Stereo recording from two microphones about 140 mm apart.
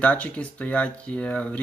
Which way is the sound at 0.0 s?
10° left (ahead or behind).